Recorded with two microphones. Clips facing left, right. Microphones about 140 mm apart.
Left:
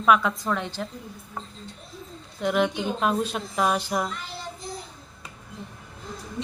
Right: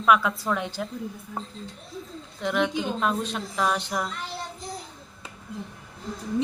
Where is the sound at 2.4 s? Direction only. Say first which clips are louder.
Left 2 dB; 5° left (ahead or behind).